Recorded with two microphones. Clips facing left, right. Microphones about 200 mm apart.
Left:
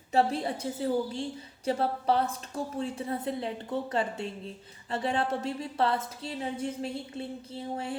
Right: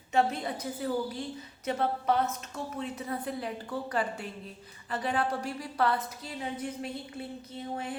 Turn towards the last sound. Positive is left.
turn(degrees=30)  # may be behind; listen again after turning